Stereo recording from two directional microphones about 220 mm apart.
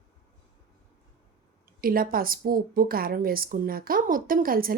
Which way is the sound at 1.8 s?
40° right (ahead or behind).